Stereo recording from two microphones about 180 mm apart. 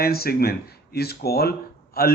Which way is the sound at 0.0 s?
60° left (ahead or behind).